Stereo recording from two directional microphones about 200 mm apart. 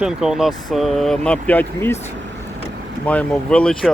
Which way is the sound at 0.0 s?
5° right (ahead or behind).